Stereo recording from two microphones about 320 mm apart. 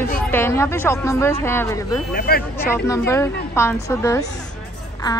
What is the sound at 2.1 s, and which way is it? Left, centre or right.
Speech, left.